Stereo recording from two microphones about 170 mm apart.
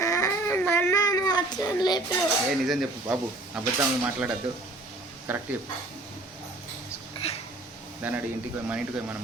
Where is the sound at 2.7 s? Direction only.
5° right (ahead or behind).